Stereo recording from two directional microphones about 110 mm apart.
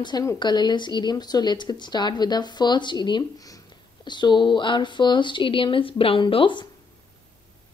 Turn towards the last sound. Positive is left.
turn(degrees=50)  # may be behind; listen again after turning